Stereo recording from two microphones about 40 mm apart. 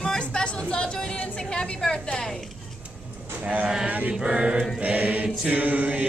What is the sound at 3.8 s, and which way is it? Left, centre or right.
Male singing, right.